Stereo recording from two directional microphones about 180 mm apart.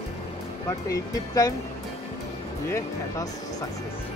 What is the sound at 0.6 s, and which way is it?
Speech, 20° left (ahead or behind).